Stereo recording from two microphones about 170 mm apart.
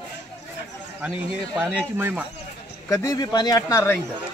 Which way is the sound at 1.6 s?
10° right (ahead or behind).